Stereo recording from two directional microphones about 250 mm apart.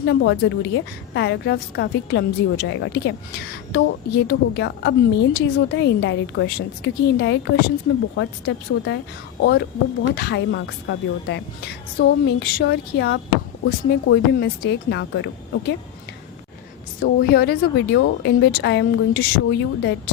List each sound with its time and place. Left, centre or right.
0.0 s a woman's voice: left
17.0 s a woman's voice: left